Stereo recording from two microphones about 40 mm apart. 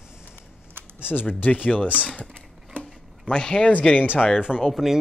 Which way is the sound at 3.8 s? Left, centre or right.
Left.